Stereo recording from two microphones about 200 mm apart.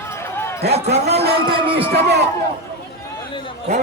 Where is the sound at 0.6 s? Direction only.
55° right (ahead or behind).